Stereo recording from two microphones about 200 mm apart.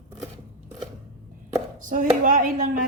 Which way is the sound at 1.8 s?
40° right (ahead or behind).